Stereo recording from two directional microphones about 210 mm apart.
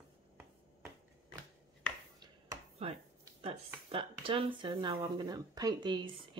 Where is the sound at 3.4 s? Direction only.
25° right (ahead or behind).